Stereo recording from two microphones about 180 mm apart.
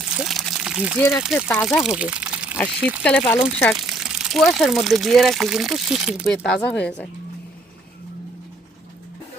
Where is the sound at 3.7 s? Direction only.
5° right (ahead or behind).